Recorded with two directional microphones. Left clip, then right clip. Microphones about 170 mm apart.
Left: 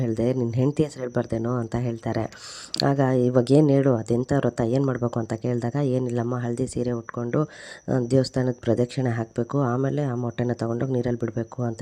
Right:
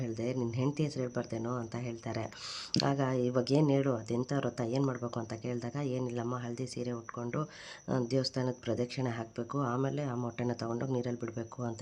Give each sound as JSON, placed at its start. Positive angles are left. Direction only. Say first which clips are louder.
{"t": 0.0, "sound": "speech", "louder": "left 11 dB", "side_deg": 45}
{"t": 4.8, "sound": "speech", "louder": "left 9 dB", "side_deg": 35}